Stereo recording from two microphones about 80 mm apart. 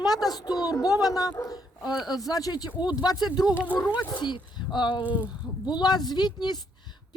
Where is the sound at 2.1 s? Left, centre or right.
Left.